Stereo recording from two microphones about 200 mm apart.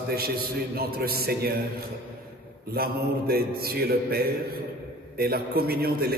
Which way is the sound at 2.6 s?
50° right (ahead or behind).